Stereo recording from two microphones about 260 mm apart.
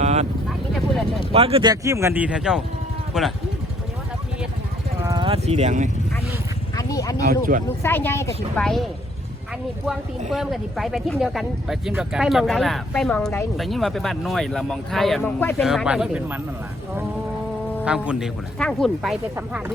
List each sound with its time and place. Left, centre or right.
0.0 s vehicle: right
1.3 s speech: right; by 3.3 s centre
4.9 s vehicle: centre
6.7 s speech: centre
7.3 s speech: right
7.8 s speech: centre
17.8 s speech: centre